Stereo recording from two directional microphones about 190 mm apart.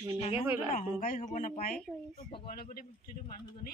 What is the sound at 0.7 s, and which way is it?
Speech, 45° left (ahead or behind).